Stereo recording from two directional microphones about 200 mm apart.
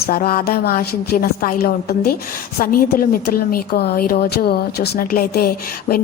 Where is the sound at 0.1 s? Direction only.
45° left (ahead or behind).